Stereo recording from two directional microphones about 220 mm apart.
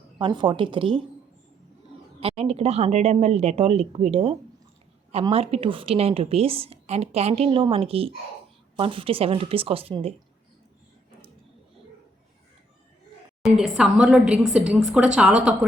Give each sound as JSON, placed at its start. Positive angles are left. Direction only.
{"t": 0.2, "sound": "a woman's voice", "side_deg": -20}
{"t": 2.2, "sound": "a woman's voice", "side_deg": -25}
{"t": 13.4, "sound": "a woman's voice", "side_deg": -5}